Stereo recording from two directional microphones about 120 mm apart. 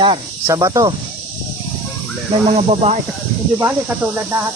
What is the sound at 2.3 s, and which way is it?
Speech, 55° right (ahead or behind).